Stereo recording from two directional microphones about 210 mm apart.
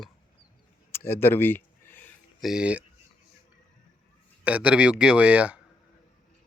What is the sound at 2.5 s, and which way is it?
Speech, 5° right (ahead or behind).